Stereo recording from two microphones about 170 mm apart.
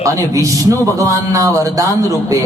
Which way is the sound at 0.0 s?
20° right (ahead or behind).